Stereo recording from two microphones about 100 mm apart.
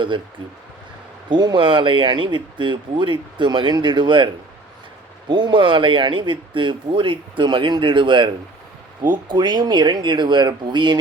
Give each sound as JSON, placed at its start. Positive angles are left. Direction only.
{"t": 1.3, "sound": "speech", "side_deg": -45}
{"t": 5.3, "sound": "speech", "side_deg": -50}